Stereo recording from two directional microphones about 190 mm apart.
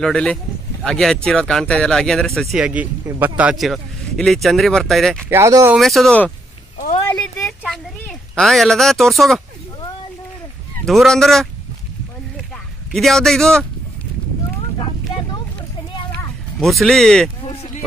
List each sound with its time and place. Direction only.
0.0 s speech: 5° left (ahead or behind)
5.3 s speech: 15° right (ahead or behind)
5.8 s speech: centre (ahead or behind)
7.1 s a sound: 15° left (ahead or behind)
7.4 s a sound: centre (ahead or behind)
10.9 s speech: centre (ahead or behind)
12.9 s speech: centre (ahead or behind)
16.5 s speech: centre (ahead or behind)